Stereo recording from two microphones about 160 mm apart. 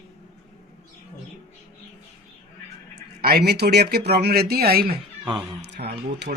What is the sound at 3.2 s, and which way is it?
Speech, 85° right.